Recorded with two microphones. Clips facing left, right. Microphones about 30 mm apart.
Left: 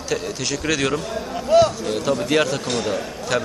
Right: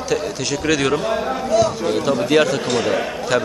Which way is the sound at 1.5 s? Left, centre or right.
Left.